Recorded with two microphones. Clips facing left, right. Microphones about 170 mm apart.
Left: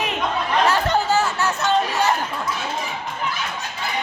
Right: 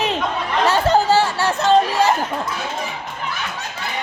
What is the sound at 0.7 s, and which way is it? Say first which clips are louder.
Chatter: right 4 dB; 30° right (ahead or behind).